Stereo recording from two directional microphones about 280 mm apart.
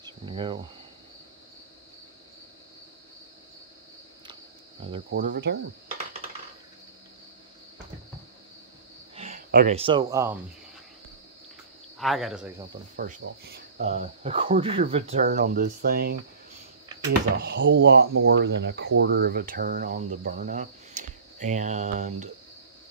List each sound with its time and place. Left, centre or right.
0.0 s insect: centre
5.1 s speech: right
9.1 s speech: right
12.0 s speech: centre
12.9 s speech: right
17.4 s speech: right